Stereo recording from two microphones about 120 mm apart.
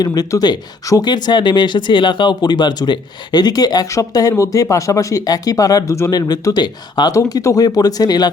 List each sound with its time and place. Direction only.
0.0 s speech: 35° left (ahead or behind)